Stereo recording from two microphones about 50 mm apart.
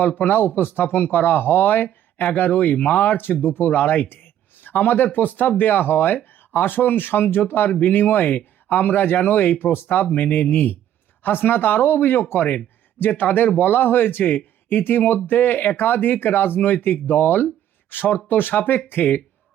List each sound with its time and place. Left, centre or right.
0.1 s speech: left